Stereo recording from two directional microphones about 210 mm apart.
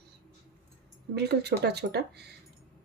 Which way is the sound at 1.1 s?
50° right (ahead or behind).